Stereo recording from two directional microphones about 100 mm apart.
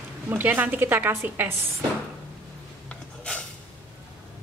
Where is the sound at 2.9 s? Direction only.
10° left (ahead or behind).